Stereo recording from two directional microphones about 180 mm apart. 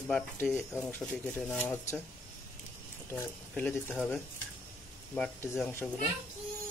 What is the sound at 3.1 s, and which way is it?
Speech, 10° left (ahead or behind).